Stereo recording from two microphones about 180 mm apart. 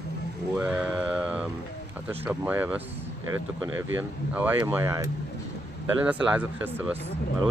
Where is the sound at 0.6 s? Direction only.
10° right (ahead or behind).